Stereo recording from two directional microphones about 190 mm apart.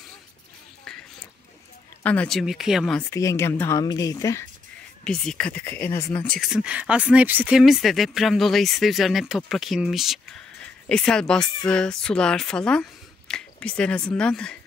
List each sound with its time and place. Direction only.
0.9 s a sound: 5° left (ahead or behind)
2.0 s speech: 5° left (ahead or behind)
3.1 s speech: 15° left (ahead or behind)
5.0 s speech: 5° left (ahead or behind)